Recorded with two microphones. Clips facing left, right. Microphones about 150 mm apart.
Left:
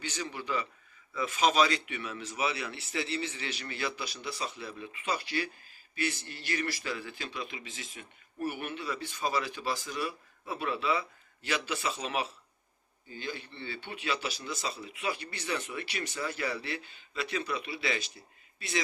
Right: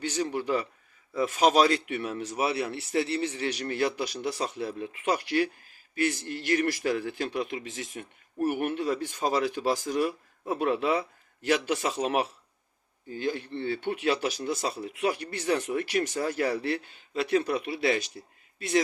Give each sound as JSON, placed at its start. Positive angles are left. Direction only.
{"t": 0.1, "sound": "a man's voice", "side_deg": -50}
{"t": 2.5, "sound": "a man's voice", "side_deg": -40}
{"t": 5.9, "sound": "a man's voice", "side_deg": -65}